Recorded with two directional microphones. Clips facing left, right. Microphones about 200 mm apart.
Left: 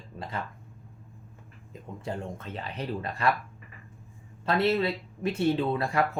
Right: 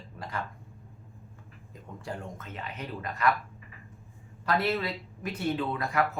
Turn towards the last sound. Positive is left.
turn(degrees=30)  # may be behind; listen again after turning